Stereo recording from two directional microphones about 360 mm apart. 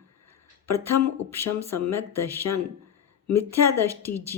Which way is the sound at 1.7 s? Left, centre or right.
Centre.